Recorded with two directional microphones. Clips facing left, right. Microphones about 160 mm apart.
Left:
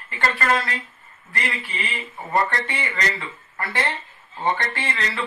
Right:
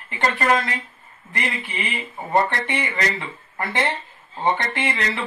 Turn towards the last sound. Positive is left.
turn(degrees=-20)  # may be behind; listen again after turning